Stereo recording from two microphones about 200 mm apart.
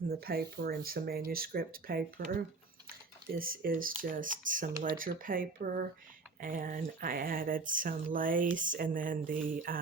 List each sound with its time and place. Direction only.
0.1 s speech: 50° right (ahead or behind)
3.3 s speech: 45° right (ahead or behind)